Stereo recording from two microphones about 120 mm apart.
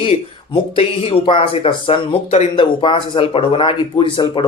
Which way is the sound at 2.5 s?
45° left (ahead or behind).